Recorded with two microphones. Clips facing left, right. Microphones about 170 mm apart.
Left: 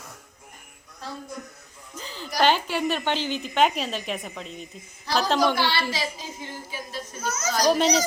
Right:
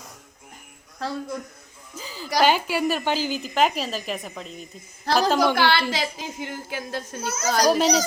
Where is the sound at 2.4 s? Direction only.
10° right (ahead or behind).